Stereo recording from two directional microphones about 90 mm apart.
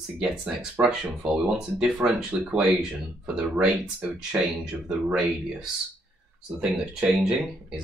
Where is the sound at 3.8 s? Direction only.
15° right (ahead or behind).